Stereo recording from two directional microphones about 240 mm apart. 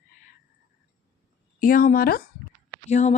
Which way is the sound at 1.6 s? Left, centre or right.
Left.